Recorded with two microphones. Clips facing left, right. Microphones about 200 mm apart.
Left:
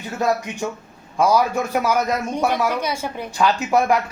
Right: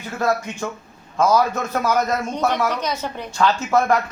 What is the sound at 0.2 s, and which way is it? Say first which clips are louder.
A man's voice: even; 15° left (ahead or behind).